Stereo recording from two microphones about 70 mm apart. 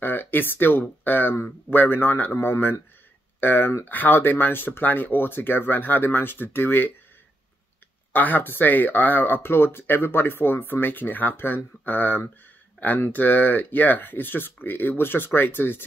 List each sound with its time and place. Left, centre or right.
0.0 s speech: left
8.1 s speech: left